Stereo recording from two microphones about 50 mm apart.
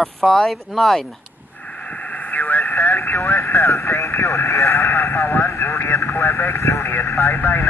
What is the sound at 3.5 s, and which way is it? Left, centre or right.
Speech, left.